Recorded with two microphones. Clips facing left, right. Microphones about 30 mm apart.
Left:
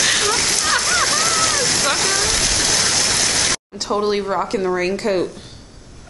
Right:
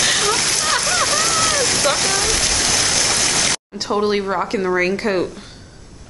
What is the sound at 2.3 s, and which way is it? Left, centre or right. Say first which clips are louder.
Stream: even; right.